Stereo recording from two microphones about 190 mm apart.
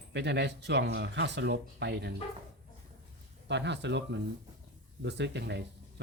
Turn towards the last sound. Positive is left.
turn(degrees=-65)  # may be behind; listen again after turning